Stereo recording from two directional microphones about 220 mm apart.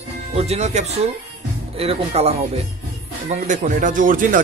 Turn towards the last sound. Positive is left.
turn(degrees=-40)  # may be behind; listen again after turning